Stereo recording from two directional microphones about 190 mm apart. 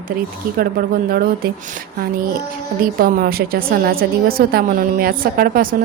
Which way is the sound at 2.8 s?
50° right (ahead or behind).